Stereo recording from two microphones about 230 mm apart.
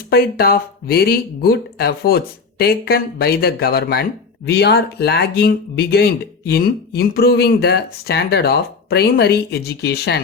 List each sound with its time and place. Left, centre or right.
0.1 s speech: left